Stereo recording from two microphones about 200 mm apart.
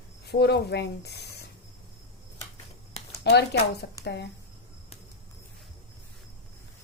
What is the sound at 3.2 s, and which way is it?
A woman's voice, 55° left (ahead or behind).